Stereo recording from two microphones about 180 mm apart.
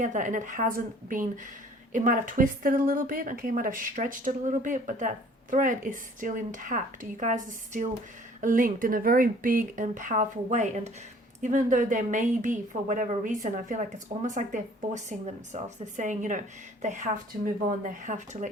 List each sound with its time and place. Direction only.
0.0 s a woman's voice: 45° right (ahead or behind)
1.9 s a woman's voice: 45° right (ahead or behind)